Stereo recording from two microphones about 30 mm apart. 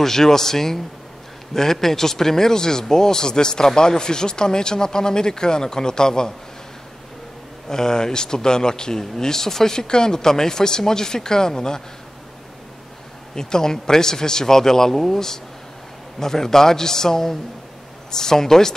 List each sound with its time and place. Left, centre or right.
0.0 s a man's voice: centre
7.7 s speech: left
13.3 s a man's voice: left